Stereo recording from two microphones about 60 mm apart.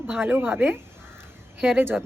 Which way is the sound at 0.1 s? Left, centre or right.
Right.